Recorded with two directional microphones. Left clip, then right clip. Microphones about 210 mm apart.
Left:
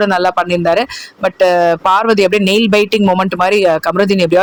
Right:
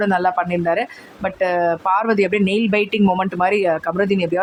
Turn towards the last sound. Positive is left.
turn(degrees=25)  # may be behind; listen again after turning